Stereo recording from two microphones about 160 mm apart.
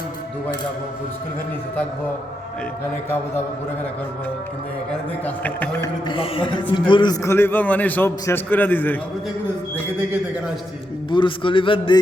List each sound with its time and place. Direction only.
4.9 s a man's voice: 10° left (ahead or behind)
5.8 s speech: 30° left (ahead or behind)
7.2 s a man's voice: 15° left (ahead or behind)
11.1 s a man's voice: 30° left (ahead or behind)